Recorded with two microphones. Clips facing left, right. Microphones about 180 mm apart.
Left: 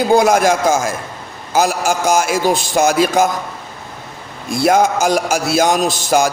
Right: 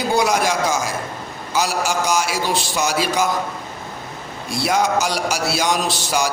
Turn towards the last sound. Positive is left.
turn(degrees=50)  # may be behind; listen again after turning